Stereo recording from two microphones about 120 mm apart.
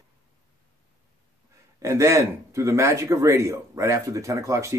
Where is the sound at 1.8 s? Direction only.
25° right (ahead or behind).